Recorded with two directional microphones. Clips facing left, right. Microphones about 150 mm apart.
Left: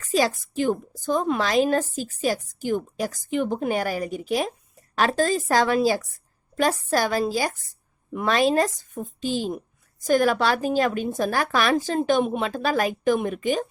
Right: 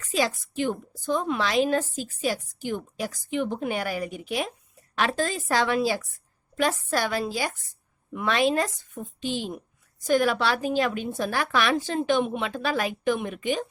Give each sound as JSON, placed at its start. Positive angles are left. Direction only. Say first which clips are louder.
{"t": 0.1, "sound": "a woman's voice", "louder": "left 4 dB", "side_deg": 40}